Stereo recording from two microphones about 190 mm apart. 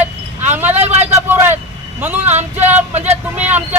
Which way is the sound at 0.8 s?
35° right (ahead or behind).